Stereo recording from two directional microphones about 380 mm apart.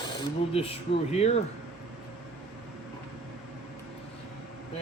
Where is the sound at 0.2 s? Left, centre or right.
Centre.